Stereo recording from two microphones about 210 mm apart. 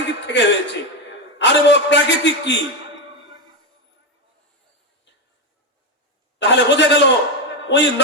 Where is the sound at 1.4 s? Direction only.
55° left (ahead or behind).